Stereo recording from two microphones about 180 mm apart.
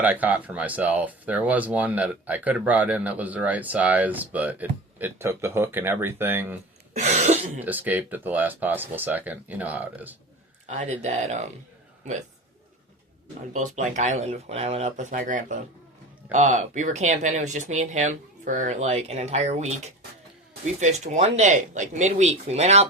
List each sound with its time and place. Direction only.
0.0 s speech: 10° right (ahead or behind)
6.9 s speech: 40° right (ahead or behind)
7.6 s speech: 10° right (ahead or behind)
10.7 s speech: 40° right (ahead or behind)
13.5 s speech: 45° right (ahead or behind)